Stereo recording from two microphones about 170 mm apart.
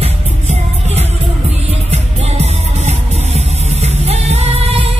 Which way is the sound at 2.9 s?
40° right (ahead or behind).